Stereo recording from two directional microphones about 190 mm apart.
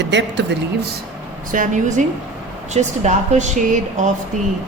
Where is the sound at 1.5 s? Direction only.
45° right (ahead or behind).